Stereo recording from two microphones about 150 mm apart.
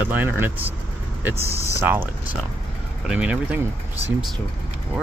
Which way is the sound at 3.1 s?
5° right (ahead or behind).